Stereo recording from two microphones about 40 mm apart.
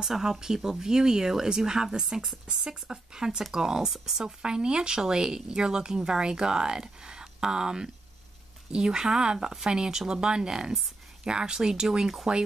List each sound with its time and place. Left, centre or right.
0.0 s speech: centre